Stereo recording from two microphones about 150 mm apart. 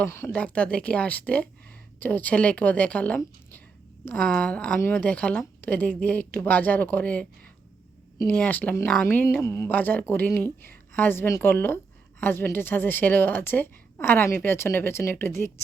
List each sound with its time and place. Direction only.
0.0 s a woman's voice: 15° left (ahead or behind)